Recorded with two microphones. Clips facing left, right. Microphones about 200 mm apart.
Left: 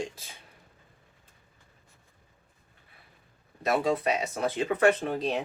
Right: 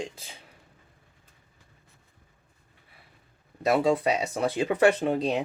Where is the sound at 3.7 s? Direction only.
30° right (ahead or behind).